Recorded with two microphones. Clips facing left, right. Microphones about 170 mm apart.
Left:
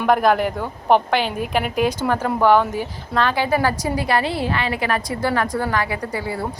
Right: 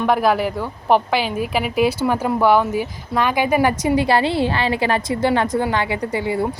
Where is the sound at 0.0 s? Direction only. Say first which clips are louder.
Even; 5° right (ahead or behind).